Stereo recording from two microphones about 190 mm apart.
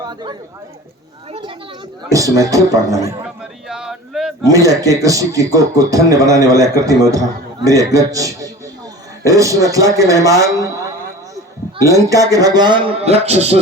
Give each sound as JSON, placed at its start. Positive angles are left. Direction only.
{"t": 0.0, "sound": "a man's voice", "side_deg": -20}
{"t": 2.0, "sound": "a man's voice", "side_deg": -15}
{"t": 3.2, "sound": "a sound", "side_deg": -5}
{"t": 4.4, "sound": "a man's voice", "side_deg": -15}
{"t": 11.8, "sound": "a man's voice", "side_deg": -15}